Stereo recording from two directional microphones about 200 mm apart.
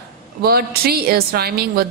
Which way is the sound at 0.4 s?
50° right (ahead or behind).